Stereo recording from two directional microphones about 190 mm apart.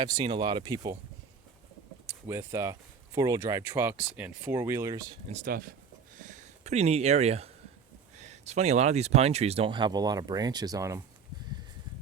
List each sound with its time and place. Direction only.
0.0 s speech: 25° right (ahead or behind)
2.0 s speech: 15° right (ahead or behind)
5.3 s speech: 45° right (ahead or behind)
6.1 s a sound: 40° right (ahead or behind)
8.2 s speech: 35° right (ahead or behind); by 11.0 s 15° right (ahead or behind)